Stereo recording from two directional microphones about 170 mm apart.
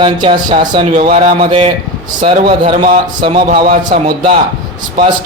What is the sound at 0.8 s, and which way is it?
Speech, 45° right (ahead or behind).